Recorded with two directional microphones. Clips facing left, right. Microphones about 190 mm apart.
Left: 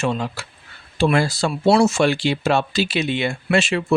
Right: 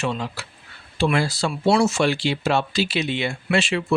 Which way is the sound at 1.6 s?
25° left (ahead or behind).